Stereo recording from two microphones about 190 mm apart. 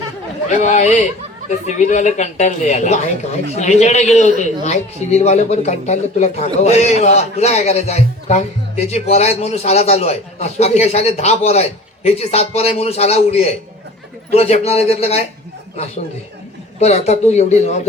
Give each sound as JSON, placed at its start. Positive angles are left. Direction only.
{"t": 0.5, "sound": "a man's voice", "side_deg": 40}
{"t": 16.8, "sound": "a man's voice", "side_deg": 35}